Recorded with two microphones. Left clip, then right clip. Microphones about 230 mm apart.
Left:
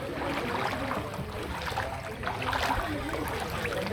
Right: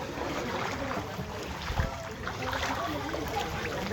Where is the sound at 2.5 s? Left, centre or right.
Left.